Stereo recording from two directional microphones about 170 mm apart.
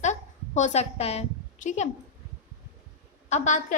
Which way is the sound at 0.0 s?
45° left (ahead or behind).